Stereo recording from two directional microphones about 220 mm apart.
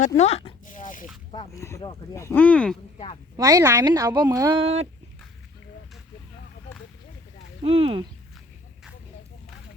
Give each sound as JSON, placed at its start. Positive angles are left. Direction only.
{"t": 0.2, "sound": "zipper", "side_deg": 30}
{"t": 1.5, "sound": "speech", "side_deg": 15}
{"t": 3.3, "sound": "a woman's voice", "side_deg": -15}
{"t": 4.6, "sound": "speech", "side_deg": -30}
{"t": 7.6, "sound": "speech", "side_deg": -25}